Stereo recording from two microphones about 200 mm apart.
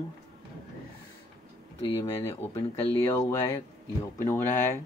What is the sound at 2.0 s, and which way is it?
Speech, 15° left (ahead or behind).